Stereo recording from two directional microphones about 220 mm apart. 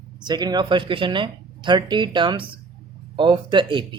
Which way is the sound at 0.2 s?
20° right (ahead or behind).